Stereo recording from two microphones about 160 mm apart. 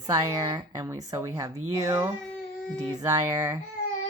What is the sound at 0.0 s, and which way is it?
Speech, 20° right (ahead or behind).